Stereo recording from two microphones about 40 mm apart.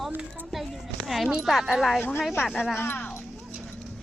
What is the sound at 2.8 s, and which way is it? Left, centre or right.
Speech, left.